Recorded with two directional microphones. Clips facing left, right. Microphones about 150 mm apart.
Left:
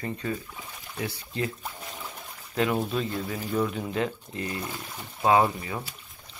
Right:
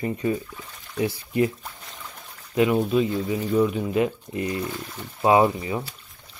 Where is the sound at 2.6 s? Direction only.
5° right (ahead or behind).